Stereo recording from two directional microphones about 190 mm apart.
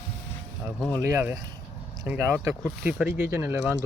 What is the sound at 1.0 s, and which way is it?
Speech, 15° right (ahead or behind).